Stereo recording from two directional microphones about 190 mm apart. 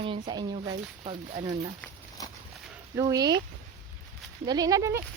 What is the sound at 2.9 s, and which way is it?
Speech, 15° right (ahead or behind).